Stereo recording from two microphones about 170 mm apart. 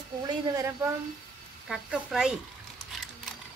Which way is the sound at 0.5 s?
15° right (ahead or behind).